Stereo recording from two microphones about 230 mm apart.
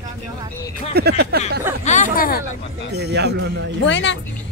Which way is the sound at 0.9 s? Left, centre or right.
Right.